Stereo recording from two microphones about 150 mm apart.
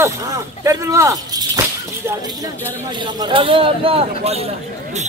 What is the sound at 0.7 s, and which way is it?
Speech, 20° right (ahead or behind).